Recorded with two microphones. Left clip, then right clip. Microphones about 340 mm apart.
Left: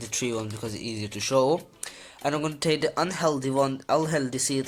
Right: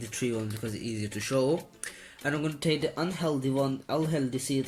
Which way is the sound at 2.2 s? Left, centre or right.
Centre.